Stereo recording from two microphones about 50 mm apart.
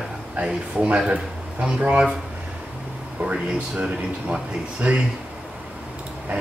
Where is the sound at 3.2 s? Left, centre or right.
Right.